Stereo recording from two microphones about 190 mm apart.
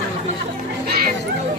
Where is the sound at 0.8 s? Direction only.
55° right (ahead or behind).